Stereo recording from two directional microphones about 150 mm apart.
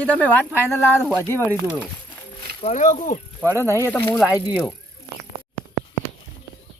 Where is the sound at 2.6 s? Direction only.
50° left (ahead or behind).